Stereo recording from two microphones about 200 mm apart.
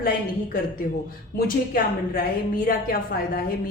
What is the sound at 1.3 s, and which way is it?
Speech, 45° left (ahead or behind).